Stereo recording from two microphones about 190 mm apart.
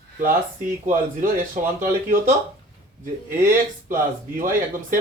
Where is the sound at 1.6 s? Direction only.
45° right (ahead or behind).